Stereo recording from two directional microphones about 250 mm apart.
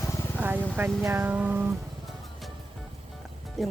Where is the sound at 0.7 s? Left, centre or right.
Centre.